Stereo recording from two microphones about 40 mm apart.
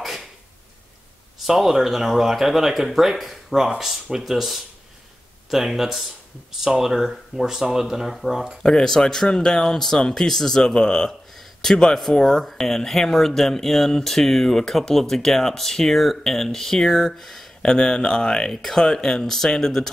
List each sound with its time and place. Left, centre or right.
1.4 s speech: centre
8.6 s speech: centre
11.1 s a sound: centre
11.7 s speech: centre
17.6 s speech: centre